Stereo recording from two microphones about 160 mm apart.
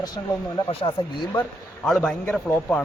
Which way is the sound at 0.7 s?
35° left (ahead or behind).